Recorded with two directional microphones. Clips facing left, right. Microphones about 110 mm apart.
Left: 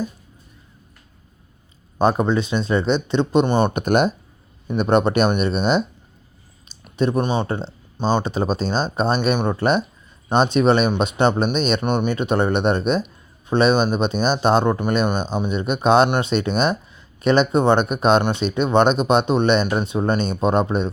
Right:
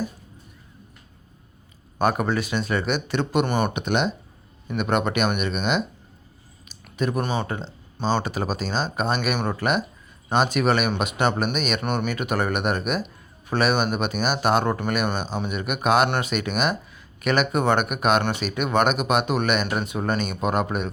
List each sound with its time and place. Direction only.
2.0 s speech: 25° left (ahead or behind)
3.7 s speech: 45° left (ahead or behind)
4.8 s speech: 35° left (ahead or behind)